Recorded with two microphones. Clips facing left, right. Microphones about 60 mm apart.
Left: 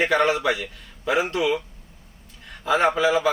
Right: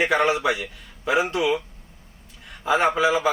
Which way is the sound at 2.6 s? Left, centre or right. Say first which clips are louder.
Even; centre.